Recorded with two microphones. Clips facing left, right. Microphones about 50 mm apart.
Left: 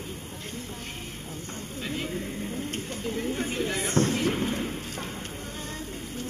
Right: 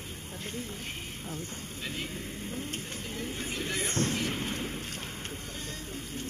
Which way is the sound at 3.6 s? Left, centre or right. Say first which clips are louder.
Left 2 dB; centre.